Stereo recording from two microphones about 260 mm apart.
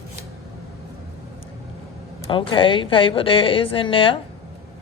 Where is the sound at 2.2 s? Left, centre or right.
Centre.